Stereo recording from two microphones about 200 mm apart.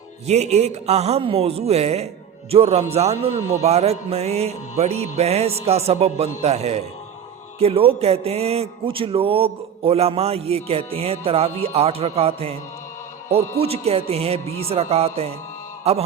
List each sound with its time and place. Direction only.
0.3 s a man's voice: 35° right (ahead or behind)